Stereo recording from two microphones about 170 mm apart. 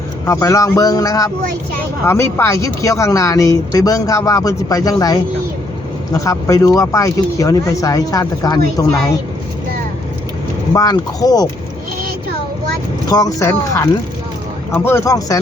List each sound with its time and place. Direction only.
0.3 s speech: 20° left (ahead or behind)
10.8 s speech: 20° left (ahead or behind)
13.1 s speech: 20° left (ahead or behind)